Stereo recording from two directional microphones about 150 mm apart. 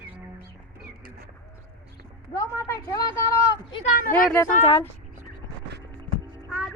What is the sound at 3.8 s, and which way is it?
Speech, 65° left (ahead or behind).